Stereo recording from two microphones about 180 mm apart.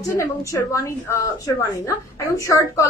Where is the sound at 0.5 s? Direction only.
15° left (ahead or behind).